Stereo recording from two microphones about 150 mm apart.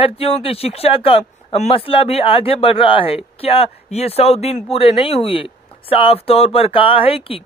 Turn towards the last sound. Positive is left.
turn(degrees=40)  # may be behind; listen again after turning